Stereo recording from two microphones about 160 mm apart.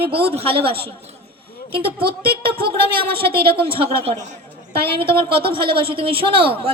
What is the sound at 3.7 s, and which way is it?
A woman's voice, 35° right (ahead or behind).